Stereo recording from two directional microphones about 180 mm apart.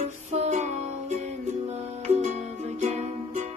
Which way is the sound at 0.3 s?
40° right (ahead or behind).